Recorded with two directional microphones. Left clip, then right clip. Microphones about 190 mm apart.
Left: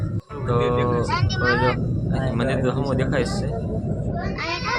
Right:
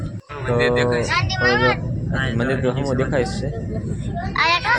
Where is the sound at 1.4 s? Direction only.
10° right (ahead or behind).